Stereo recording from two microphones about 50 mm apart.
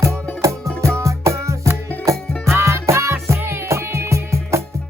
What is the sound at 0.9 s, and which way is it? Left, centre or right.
Music, right.